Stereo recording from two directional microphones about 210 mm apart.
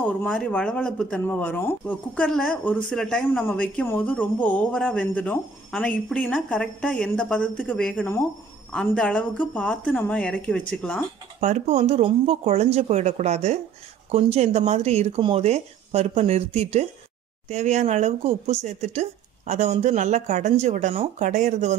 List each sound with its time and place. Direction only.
0.2 s speech: 5° left (ahead or behind)
11.4 s speech: 35° right (ahead or behind)